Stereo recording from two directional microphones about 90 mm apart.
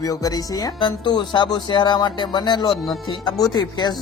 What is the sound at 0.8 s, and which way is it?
Speech, 60° left (ahead or behind).